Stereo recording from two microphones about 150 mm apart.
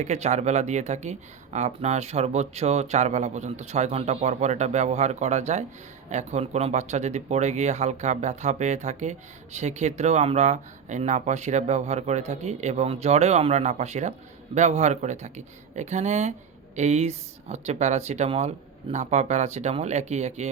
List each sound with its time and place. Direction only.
0.0 s speech: 50° right (ahead or behind)